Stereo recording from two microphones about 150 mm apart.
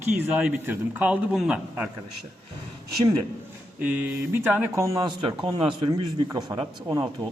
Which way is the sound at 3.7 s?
10° right (ahead or behind).